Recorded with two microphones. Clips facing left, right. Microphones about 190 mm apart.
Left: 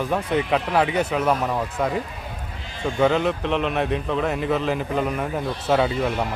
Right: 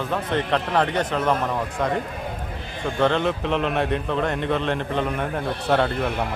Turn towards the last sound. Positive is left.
turn(degrees=5)  # may be behind; listen again after turning